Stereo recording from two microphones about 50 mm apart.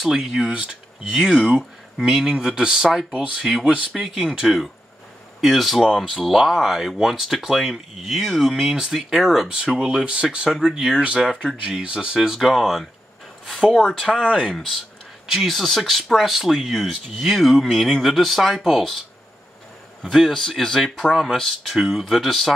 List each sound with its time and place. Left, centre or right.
0.0 s speech: centre
9.5 s speech: centre
12.2 s speech: centre
14.2 s speech: centre
15.3 s speech: centre
20.0 s speech: centre